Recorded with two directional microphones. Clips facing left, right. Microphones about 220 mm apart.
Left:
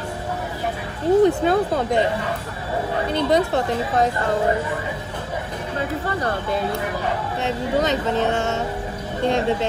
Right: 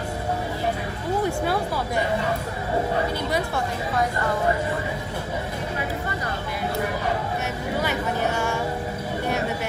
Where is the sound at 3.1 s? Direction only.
25° left (ahead or behind).